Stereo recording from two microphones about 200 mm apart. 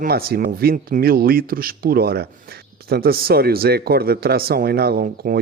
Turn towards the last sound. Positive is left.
turn(degrees=-50)  # may be behind; listen again after turning